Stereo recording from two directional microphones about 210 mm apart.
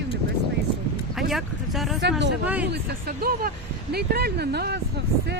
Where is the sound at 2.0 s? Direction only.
55° right (ahead or behind).